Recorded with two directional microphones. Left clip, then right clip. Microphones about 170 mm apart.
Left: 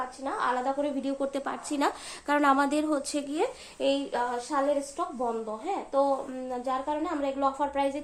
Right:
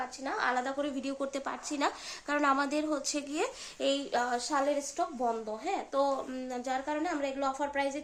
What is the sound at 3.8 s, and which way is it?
A woman's voice, 30° right (ahead or behind).